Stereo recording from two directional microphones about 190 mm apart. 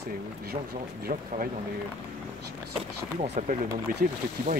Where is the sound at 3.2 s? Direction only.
35° right (ahead or behind).